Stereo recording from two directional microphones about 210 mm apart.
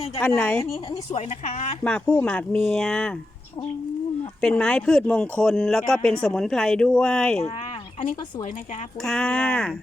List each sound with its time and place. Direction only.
0.2 s speech: 5° left (ahead or behind)
0.6 s speech: 30° left (ahead or behind)
1.8 s speech: 5° left (ahead or behind)
4.4 s speech: 5° left (ahead or behind)
9.0 s speech: 5° left (ahead or behind)